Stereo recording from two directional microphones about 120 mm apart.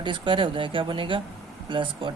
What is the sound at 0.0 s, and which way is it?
Speech, 45° right (ahead or behind).